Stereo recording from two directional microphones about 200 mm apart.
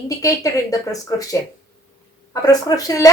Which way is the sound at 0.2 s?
15° left (ahead or behind).